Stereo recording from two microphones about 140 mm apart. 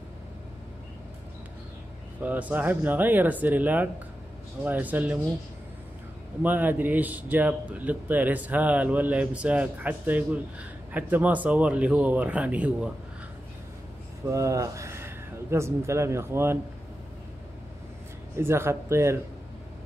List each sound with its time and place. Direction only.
2.2 s speech: 10° right (ahead or behind)
6.4 s speech: 15° right (ahead or behind)
14.3 s speech: 25° right (ahead or behind)
18.3 s speech: 20° right (ahead or behind)